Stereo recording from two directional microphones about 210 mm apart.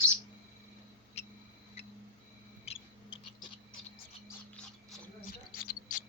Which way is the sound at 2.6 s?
25° left (ahead or behind).